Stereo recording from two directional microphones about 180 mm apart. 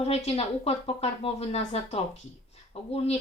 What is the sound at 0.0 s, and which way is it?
Speech, 35° left (ahead or behind).